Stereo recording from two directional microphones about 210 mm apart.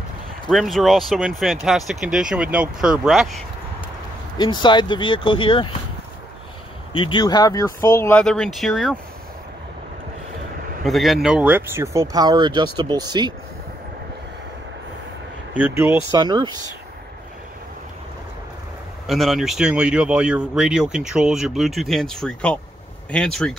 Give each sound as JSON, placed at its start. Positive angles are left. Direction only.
{"t": 0.5, "sound": "speech", "side_deg": 0}
{"t": 4.4, "sound": "speech", "side_deg": 20}
{"t": 6.9, "sound": "speech", "side_deg": 25}
{"t": 10.9, "sound": "speech", "side_deg": 0}
{"t": 15.5, "sound": "speech", "side_deg": -10}
{"t": 19.0, "sound": "speech", "side_deg": 0}